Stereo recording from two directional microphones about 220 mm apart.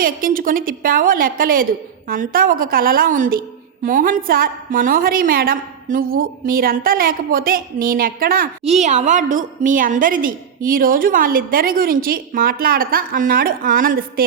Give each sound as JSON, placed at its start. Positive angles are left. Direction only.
{"t": 0.0, "sound": "a woman's voice", "side_deg": -40}
{"t": 8.6, "sound": "a woman's voice", "side_deg": -30}